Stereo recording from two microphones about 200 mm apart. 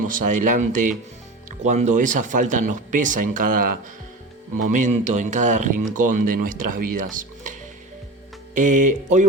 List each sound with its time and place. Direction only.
0.0 s speech: 40° right (ahead or behind)
8.5 s speech: 40° right (ahead or behind)